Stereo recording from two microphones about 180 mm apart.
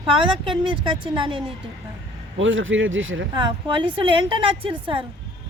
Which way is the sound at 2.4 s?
90° right.